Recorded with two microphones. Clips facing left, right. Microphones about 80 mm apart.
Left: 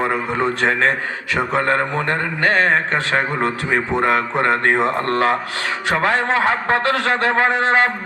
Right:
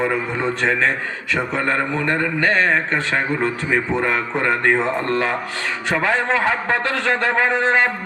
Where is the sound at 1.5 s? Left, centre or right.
Left.